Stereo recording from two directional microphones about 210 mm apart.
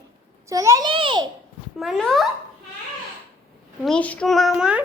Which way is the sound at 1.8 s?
Centre (ahead or behind).